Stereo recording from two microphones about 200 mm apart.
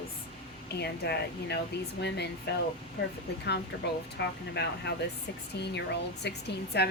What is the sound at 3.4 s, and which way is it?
Speech, 55° left (ahead or behind).